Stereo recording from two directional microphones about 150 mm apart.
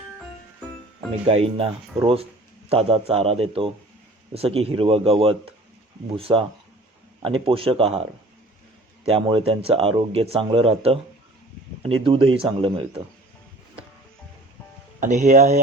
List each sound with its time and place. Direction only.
1.3 s speech: 40° right (ahead or behind)
9.0 s speech: 35° right (ahead or behind)
15.0 s speech: 55° right (ahead or behind)